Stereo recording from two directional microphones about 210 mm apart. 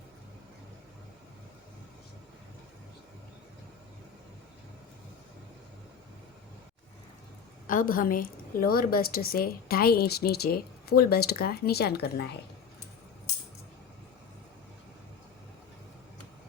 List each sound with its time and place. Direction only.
7.7 s a woman's voice: 40° left (ahead or behind)